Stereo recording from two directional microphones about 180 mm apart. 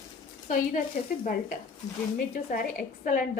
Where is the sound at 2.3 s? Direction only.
50° left (ahead or behind).